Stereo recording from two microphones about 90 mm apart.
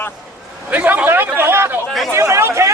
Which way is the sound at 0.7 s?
20° right (ahead or behind).